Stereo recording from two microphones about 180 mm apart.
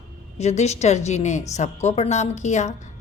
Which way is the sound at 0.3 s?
40° left (ahead or behind).